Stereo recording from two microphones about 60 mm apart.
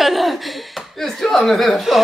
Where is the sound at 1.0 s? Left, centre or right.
Centre.